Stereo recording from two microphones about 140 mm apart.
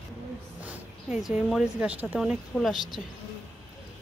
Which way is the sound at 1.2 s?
5° right (ahead or behind).